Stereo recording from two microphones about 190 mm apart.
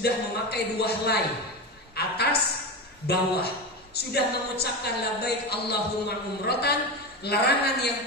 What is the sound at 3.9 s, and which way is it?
A woman's voice, 60° left (ahead or behind).